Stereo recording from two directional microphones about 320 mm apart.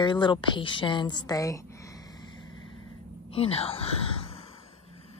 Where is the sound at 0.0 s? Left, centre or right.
Centre.